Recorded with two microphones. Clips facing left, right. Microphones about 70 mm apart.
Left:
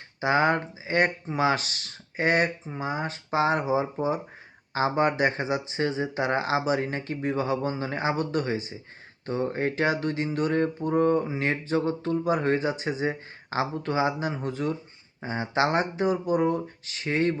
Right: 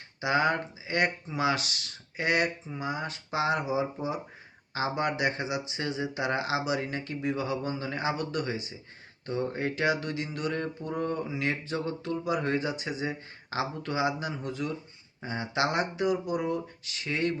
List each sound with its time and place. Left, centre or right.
0.2 s mantra: left